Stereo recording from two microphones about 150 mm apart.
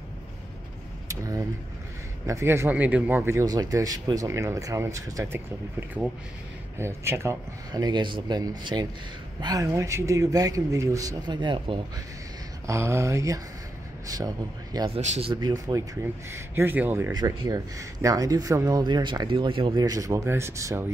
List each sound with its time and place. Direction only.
1.0 s vehicle: 20° right (ahead or behind)
2.2 s speech: 20° right (ahead or behind)
7.7 s speech: 30° right (ahead or behind)
12.6 s speech: 20° right (ahead or behind)
15.0 s speech: 45° right (ahead or behind)
15.4 s speech: 25° right (ahead or behind)
17.1 s speech: 25° right (ahead or behind)